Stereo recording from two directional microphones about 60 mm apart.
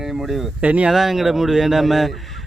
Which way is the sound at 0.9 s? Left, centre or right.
Centre.